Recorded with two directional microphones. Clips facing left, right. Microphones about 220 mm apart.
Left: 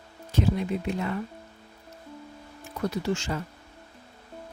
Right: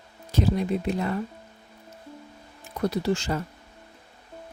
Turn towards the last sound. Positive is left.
turn(degrees=-35)  # may be behind; listen again after turning